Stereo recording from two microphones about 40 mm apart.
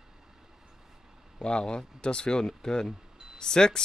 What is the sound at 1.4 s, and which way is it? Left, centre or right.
Speech, left.